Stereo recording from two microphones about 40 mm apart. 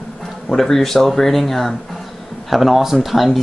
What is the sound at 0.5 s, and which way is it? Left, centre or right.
Speech, centre.